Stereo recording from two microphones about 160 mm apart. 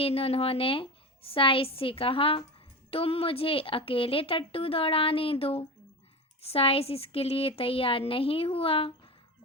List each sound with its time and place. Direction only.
0.0 s a woman's voice: 35° left (ahead or behind)